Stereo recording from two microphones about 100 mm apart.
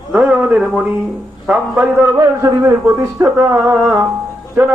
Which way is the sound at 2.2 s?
30° right (ahead or behind).